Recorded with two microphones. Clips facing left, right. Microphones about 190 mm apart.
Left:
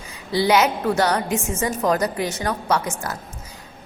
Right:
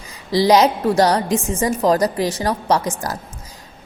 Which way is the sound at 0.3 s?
35° right (ahead or behind).